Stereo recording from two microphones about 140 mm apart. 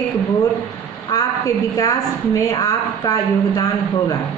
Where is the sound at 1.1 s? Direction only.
30° left (ahead or behind).